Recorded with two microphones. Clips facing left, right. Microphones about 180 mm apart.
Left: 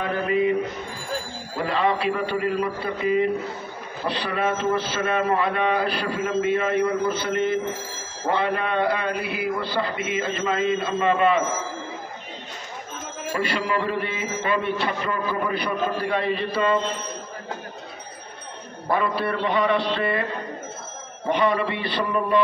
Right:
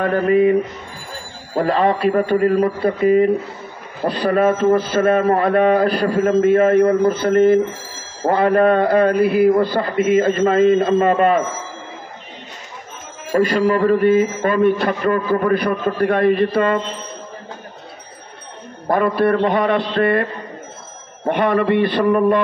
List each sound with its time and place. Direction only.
0.0 s a man's voice: 50° right (ahead or behind)
13.3 s a man's voice: 45° right (ahead or behind)
18.9 s a man's voice: 50° right (ahead or behind)
21.3 s a man's voice: 55° right (ahead or behind)